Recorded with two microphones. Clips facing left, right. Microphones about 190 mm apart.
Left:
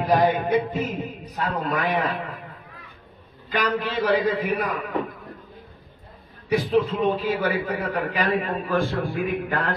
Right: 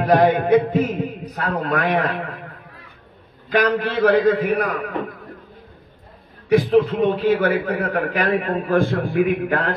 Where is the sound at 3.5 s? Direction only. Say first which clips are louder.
Right 6 dB; 55° right (ahead or behind).